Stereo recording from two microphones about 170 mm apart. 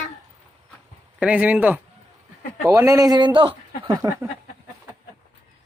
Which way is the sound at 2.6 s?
20° right (ahead or behind).